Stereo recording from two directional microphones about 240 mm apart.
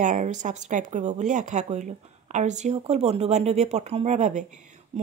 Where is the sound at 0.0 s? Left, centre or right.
Right.